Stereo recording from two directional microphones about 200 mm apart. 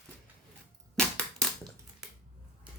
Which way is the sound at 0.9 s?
5° left (ahead or behind).